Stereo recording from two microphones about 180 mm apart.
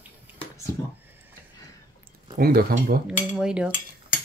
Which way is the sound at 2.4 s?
55° right (ahead or behind).